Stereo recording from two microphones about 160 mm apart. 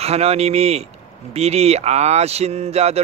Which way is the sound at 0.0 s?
40° right (ahead or behind).